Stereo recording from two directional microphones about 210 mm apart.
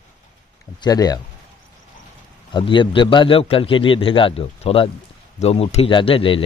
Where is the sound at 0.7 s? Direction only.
20° left (ahead or behind).